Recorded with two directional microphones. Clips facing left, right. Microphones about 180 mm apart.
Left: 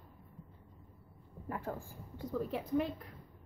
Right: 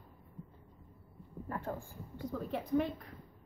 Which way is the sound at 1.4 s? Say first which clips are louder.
Even; 10° left (ahead or behind).